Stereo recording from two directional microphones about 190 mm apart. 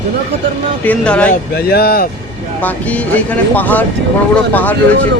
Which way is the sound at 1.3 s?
55° left (ahead or behind).